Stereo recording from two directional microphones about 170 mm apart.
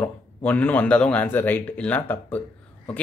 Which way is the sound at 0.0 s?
10° left (ahead or behind).